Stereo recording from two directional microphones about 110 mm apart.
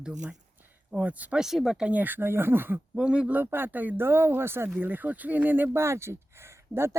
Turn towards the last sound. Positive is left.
turn(degrees=-25)  # may be behind; listen again after turning